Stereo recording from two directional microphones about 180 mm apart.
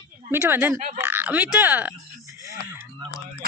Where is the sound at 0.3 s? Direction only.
10° right (ahead or behind).